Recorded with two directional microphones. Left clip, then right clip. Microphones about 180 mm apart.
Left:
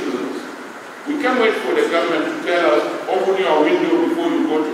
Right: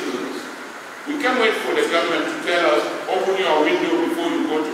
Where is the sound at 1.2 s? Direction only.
10° left (ahead or behind).